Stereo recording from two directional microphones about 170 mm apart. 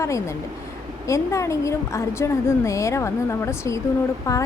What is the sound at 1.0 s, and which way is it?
A woman's voice, 20° left (ahead or behind).